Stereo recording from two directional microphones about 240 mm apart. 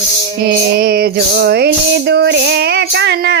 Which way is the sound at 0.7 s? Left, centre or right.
Right.